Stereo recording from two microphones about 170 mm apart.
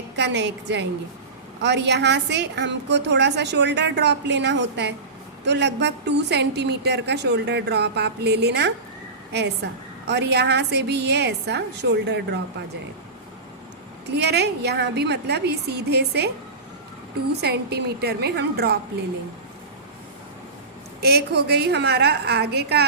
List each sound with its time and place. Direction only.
0.2 s a woman's voice: 90° right
14.1 s a woman's voice: 75° right (ahead or behind)
17.4 s a woman's voice: 70° right (ahead or behind)
21.0 s a woman's voice: 70° right (ahead or behind)